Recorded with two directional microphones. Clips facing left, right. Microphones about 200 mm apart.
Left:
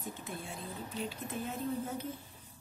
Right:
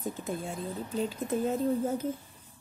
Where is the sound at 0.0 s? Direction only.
40° right (ahead or behind).